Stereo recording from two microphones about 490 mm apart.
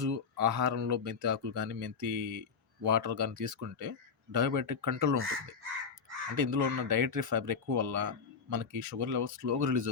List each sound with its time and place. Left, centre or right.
0.0 s speech: right
6.3 s speech: right